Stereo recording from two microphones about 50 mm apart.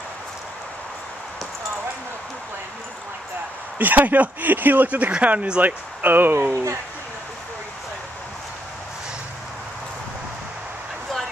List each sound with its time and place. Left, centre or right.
3.7 s speech: right